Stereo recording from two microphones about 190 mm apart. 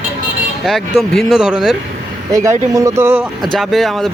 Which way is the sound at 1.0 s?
Centre (ahead or behind).